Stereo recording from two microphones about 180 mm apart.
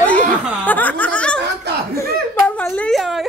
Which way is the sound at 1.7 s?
65° right (ahead or behind).